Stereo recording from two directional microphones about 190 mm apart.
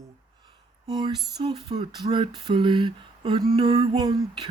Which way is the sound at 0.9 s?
20° right (ahead or behind).